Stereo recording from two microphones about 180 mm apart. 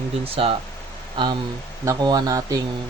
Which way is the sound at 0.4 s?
30° right (ahead or behind).